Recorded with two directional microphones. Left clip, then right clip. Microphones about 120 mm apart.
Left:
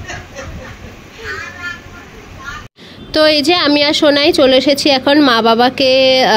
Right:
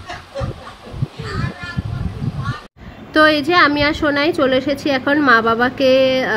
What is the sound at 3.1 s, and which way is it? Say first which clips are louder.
Speech: left 2 dB; 40° left (ahead or behind).